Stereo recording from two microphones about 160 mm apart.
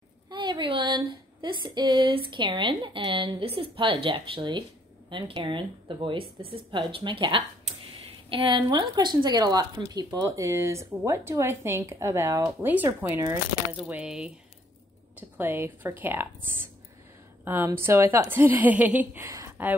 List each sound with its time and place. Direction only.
0.3 s a woman's voice: 30° right (ahead or behind); by 16.4 s 15° right (ahead or behind)
17.5 s a woman's voice: 15° right (ahead or behind)